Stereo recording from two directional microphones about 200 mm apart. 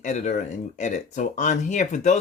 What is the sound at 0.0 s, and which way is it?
Speech, 35° left (ahead or behind).